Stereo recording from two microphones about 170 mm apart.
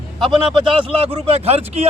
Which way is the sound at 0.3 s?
30° right (ahead or behind).